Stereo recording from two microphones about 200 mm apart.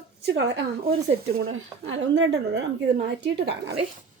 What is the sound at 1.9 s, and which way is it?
Speech, 65° right (ahead or behind).